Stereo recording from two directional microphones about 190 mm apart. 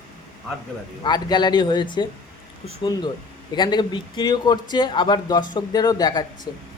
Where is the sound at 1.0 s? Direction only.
20° left (ahead or behind).